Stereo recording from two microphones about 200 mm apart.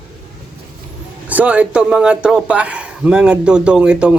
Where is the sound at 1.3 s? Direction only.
5° right (ahead or behind).